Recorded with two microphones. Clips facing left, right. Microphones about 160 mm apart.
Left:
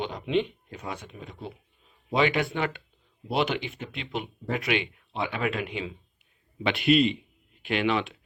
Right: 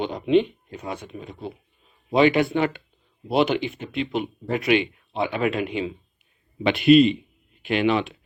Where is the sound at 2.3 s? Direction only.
25° right (ahead or behind).